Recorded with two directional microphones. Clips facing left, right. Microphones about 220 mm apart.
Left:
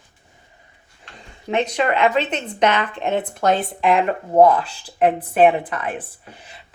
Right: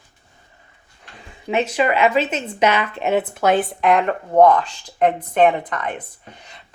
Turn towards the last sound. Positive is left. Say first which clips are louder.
# left 1 dB
turn(degrees=5)  # may be behind; listen again after turning